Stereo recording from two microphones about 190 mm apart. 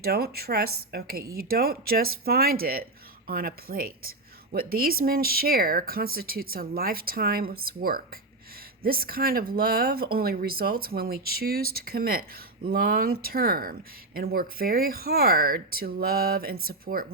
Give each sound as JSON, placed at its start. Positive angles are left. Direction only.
{"t": 0.0, "sound": "speech", "side_deg": -55}